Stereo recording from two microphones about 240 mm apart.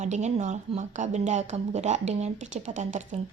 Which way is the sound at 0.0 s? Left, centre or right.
Right.